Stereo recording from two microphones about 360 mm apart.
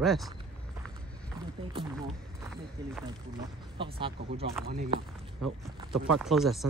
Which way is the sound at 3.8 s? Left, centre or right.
Centre.